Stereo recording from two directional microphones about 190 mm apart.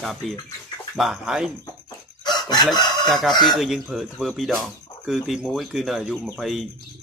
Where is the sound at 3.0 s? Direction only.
Centre (ahead or behind).